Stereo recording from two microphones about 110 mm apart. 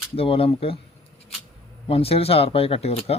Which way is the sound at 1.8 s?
65° left (ahead or behind).